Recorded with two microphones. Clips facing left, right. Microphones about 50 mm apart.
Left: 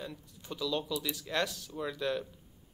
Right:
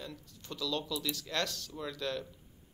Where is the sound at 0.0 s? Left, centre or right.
Centre.